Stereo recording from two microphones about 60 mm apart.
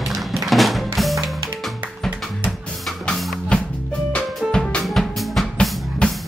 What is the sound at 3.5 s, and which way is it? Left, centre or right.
Music, centre.